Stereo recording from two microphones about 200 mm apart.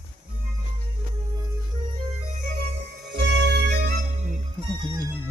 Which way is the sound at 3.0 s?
60° right (ahead or behind).